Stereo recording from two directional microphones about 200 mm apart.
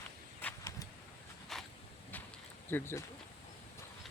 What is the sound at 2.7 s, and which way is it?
Speech, 10° left (ahead or behind).